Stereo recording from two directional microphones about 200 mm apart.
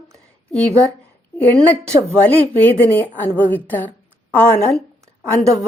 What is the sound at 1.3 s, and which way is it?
A woman's voice, 10° left (ahead or behind).